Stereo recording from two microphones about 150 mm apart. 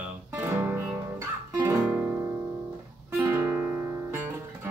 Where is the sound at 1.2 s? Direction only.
15° right (ahead or behind).